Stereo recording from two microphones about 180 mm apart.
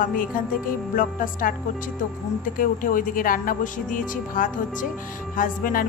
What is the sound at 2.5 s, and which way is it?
Music, 50° left (ahead or behind).